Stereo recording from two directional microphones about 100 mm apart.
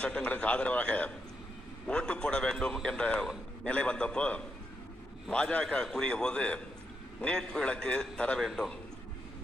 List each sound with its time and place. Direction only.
0.0 s a man's voice: 10° left (ahead or behind)